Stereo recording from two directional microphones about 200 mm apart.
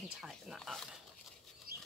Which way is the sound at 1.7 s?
50° right (ahead or behind).